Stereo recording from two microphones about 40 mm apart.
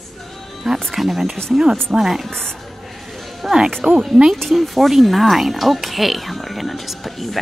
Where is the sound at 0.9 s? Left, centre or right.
Centre.